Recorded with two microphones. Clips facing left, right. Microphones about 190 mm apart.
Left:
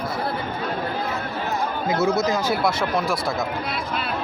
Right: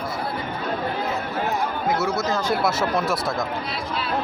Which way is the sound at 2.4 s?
5° right (ahead or behind).